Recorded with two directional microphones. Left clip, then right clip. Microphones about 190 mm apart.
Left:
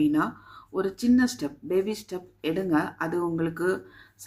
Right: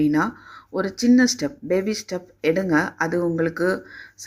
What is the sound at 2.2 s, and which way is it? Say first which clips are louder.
Speech: right 9 dB; 35° right (ahead or behind).